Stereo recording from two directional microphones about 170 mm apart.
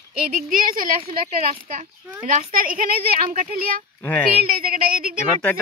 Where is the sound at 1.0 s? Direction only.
35° right (ahead or behind).